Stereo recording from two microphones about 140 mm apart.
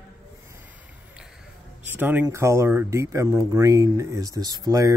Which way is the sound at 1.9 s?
15° right (ahead or behind).